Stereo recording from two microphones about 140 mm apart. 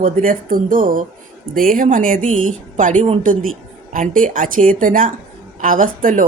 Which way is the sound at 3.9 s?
70° right (ahead or behind).